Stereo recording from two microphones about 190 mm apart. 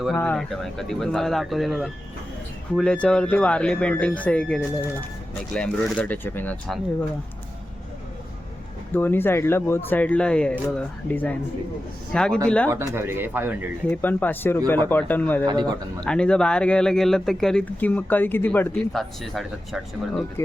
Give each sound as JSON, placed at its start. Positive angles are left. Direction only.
{"t": 0.2, "sound": "speech", "side_deg": 5}
{"t": 8.9, "sound": "speech", "side_deg": 10}
{"t": 12.7, "sound": "speech", "side_deg": -15}
{"t": 13.9, "sound": "speech", "side_deg": 10}
{"t": 15.4, "sound": "speech", "side_deg": -20}
{"t": 16.0, "sound": "speech", "side_deg": 5}